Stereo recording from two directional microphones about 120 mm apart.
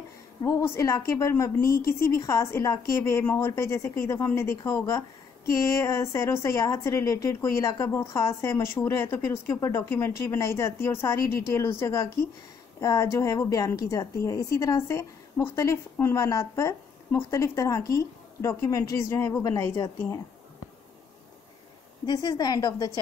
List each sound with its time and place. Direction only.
0.4 s a woman's voice: 25° left (ahead or behind)
22.0 s a woman's voice: 35° left (ahead or behind)